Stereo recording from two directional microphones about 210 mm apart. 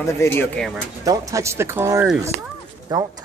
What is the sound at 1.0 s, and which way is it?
Speech, 15° right (ahead or behind).